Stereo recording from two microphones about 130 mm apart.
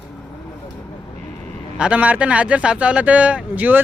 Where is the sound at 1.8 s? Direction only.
10° right (ahead or behind).